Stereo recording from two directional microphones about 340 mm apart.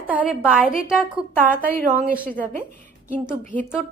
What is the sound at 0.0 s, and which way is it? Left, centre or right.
A woman's voice, centre.